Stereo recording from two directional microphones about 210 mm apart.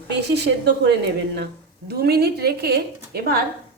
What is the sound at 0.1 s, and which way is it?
A woman's voice, 55° right (ahead or behind).